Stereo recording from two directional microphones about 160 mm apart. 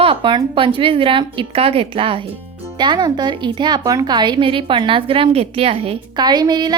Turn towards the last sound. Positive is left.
turn(degrees=-25)  # may be behind; listen again after turning